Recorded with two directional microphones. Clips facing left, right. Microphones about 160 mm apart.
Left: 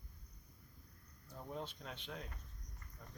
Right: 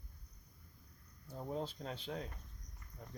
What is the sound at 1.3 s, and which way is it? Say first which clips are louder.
Speech: right 5 dB; 30° right (ahead or behind).